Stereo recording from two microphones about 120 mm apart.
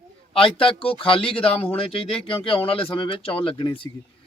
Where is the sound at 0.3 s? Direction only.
50° left (ahead or behind).